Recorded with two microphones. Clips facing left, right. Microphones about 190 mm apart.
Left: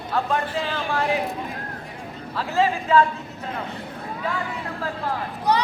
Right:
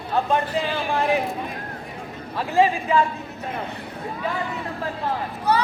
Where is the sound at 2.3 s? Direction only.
15° right (ahead or behind).